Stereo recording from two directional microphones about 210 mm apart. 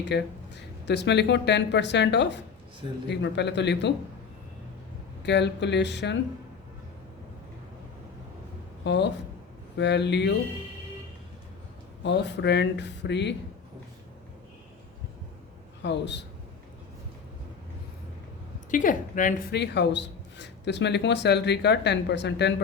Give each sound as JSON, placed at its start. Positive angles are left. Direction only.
{"t": 0.0, "sound": "speech", "side_deg": 55}
{"t": 5.2, "sound": "speech", "side_deg": 55}
{"t": 8.8, "sound": "speech", "side_deg": 55}
{"t": 12.0, "sound": "speech", "side_deg": 55}
{"t": 15.8, "sound": "speech", "side_deg": 55}
{"t": 18.7, "sound": "speech", "side_deg": 40}
{"t": 19.5, "sound": "speech", "side_deg": 55}